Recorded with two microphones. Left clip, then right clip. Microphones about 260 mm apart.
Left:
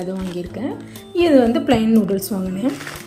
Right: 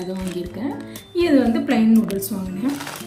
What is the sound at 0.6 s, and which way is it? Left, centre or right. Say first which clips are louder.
A woman's voice: left 1 dB; centre.